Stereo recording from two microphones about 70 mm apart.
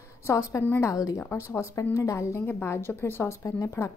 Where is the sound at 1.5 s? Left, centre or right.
Left.